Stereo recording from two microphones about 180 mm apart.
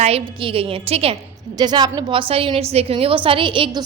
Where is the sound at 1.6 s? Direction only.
20° right (ahead or behind).